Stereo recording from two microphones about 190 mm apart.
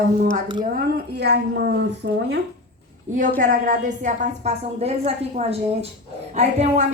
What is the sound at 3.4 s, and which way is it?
A woman's voice, 45° right (ahead or behind).